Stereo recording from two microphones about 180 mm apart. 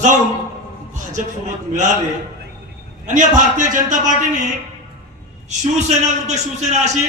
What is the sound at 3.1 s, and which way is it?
A man's voice, 45° right (ahead or behind).